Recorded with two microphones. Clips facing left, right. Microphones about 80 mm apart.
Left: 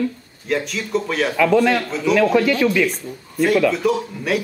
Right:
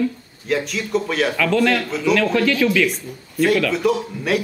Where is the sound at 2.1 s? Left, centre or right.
Centre.